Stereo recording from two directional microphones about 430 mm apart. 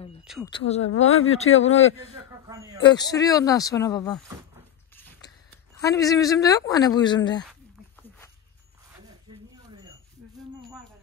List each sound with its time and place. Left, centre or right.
0.3 s speech: centre
0.8 s speech: left
2.4 s speech: centre
2.8 s speech: centre
5.8 s speech: centre